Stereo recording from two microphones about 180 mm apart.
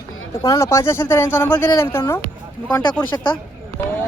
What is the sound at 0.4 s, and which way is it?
Speech, 20° left (ahead or behind).